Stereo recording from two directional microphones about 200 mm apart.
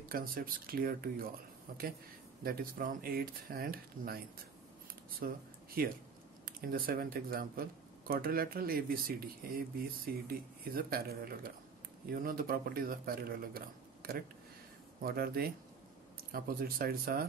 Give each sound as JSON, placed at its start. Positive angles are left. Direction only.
{"t": 0.1, "sound": "speech", "side_deg": -45}
{"t": 5.2, "sound": "speech", "side_deg": -45}